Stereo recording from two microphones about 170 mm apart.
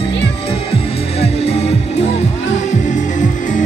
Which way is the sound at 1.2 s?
35° left (ahead or behind).